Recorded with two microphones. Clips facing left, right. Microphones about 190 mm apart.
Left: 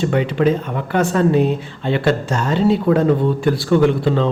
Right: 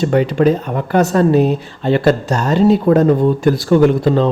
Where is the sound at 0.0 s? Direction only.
40° right (ahead or behind).